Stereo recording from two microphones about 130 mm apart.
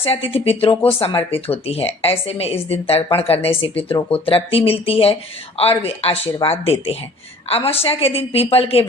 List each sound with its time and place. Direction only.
0.0 s speech: 50° left (ahead or behind)